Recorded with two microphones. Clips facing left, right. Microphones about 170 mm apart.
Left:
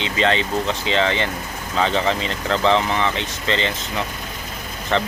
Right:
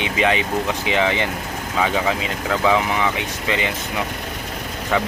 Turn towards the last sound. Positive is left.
turn(degrees=-10)  # may be behind; listen again after turning